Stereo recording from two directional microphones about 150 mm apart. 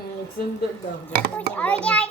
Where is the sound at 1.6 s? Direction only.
10° left (ahead or behind).